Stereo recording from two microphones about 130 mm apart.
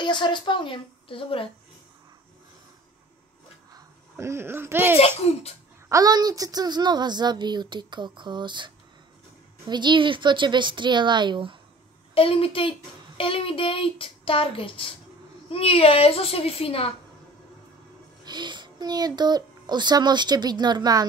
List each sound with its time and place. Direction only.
0.0 s a woman's voice: 35° left (ahead or behind)
3.7 s speech: 20° right (ahead or behind)
4.9 s speech: 55° left (ahead or behind)
5.9 s a child's voice: 25° right (ahead or behind)
12.1 s speech: 45° left (ahead or behind)
18.2 s a child's voice: 35° right (ahead or behind)